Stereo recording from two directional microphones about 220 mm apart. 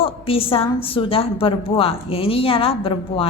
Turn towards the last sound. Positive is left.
turn(degrees=25)  # may be behind; listen again after turning